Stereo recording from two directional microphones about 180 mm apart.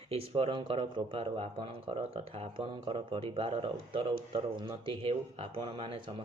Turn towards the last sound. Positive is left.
turn(degrees=-30)  # may be behind; listen again after turning